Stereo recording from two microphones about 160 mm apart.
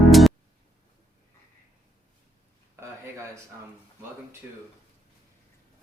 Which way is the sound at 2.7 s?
20° right (ahead or behind).